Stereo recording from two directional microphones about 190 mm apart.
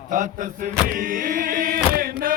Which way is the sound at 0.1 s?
45° right (ahead or behind).